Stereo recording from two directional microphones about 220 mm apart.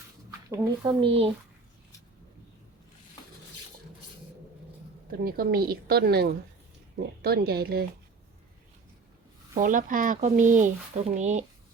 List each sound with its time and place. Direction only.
0.5 s speech: 15° right (ahead or behind)
5.2 s a woman's voice: 45° right (ahead or behind)
9.6 s speech: 35° right (ahead or behind)